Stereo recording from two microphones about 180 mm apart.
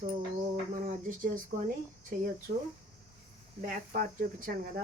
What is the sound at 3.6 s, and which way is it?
Speech, 50° right (ahead or behind).